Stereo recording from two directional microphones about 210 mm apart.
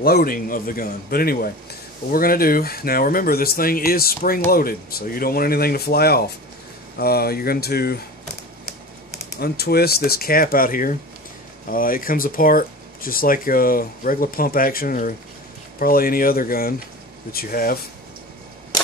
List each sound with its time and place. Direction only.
0.0 s speech: 45° left (ahead or behind)
9.4 s speech: 50° left (ahead or behind)